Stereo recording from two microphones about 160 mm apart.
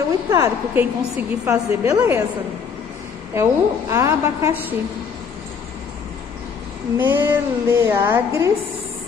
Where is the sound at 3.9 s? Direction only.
20° right (ahead or behind).